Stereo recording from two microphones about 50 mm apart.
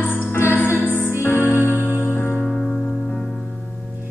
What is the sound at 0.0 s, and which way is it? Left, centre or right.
Music, left.